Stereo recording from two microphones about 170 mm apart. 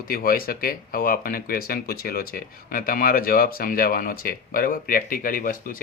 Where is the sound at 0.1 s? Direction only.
60° left (ahead or behind).